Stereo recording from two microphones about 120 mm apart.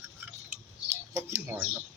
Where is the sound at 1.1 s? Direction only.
20° right (ahead or behind).